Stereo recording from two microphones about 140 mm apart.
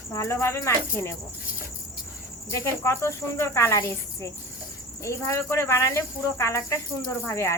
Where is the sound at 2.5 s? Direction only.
20° left (ahead or behind).